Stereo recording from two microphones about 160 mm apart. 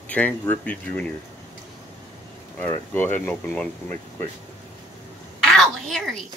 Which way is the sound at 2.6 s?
15° left (ahead or behind).